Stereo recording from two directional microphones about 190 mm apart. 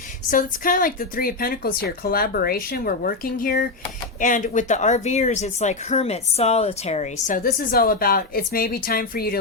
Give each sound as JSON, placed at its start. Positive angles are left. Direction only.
{"t": 0.3, "sound": "speech", "side_deg": 45}